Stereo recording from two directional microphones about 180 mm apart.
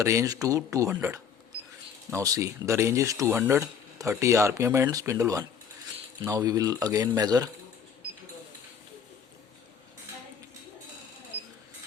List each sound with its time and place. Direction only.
0.0 s speech: 20° right (ahead or behind)